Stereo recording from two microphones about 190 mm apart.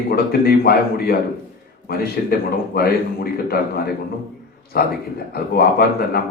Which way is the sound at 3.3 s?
55° left (ahead or behind).